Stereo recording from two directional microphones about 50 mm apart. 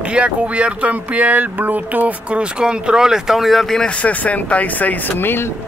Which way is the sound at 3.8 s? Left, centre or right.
Left.